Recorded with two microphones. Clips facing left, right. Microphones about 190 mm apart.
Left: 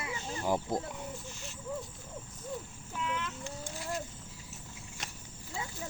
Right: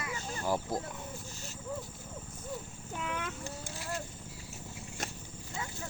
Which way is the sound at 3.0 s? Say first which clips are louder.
Left 1 dB; 55° right (ahead or behind).